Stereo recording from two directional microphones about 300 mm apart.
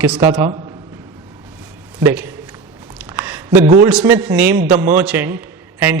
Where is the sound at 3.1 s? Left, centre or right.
Centre.